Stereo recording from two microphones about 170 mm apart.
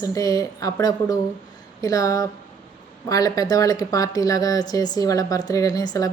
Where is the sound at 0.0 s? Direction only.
20° left (ahead or behind).